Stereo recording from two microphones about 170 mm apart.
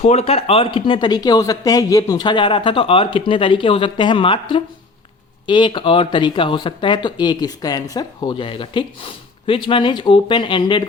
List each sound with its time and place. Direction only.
0.0 s speech: 40° left (ahead or behind)